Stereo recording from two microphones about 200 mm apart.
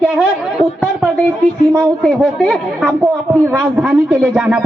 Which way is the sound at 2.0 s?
5° left (ahead or behind).